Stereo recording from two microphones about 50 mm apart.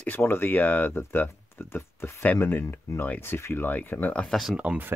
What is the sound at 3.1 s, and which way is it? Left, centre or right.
Speech, left.